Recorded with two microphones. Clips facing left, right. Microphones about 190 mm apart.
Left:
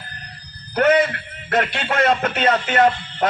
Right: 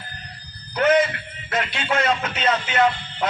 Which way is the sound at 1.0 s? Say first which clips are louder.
Left 3 dB; 55° left (ahead or behind).